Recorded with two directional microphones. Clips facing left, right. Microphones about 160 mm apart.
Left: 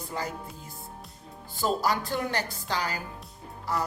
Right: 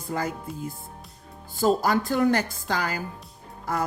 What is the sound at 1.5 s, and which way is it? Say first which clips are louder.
Music: right 5 dB; 50° right (ahead or behind).